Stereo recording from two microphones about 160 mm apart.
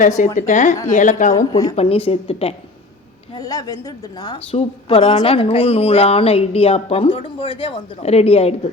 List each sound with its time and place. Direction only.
0.0 s a woman's voice: 50° left (ahead or behind)
1.4 s a woman's voice: 20° left (ahead or behind)
1.7 s speech: 40° left (ahead or behind)
3.3 s a woman's voice: 25° left (ahead or behind)
4.5 s speech: 40° left (ahead or behind)